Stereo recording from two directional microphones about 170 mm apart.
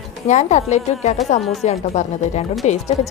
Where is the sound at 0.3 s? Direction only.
45° left (ahead or behind).